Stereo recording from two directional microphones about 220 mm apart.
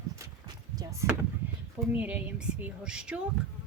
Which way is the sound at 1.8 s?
5° right (ahead or behind).